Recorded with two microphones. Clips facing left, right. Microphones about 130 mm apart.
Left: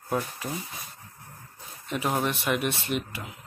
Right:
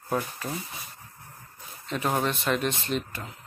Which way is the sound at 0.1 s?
5° left (ahead or behind).